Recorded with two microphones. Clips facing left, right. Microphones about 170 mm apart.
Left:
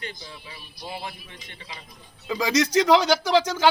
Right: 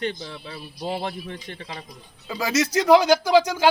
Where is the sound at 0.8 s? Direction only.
70° right (ahead or behind).